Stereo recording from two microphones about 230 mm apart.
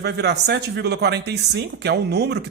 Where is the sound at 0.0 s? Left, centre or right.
Right.